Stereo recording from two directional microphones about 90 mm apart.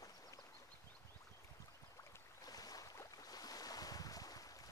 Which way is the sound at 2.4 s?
45° left (ahead or behind).